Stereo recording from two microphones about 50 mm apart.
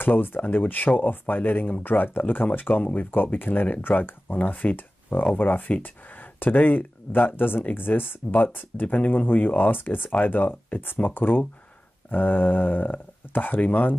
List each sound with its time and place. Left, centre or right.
0.0 s speech: left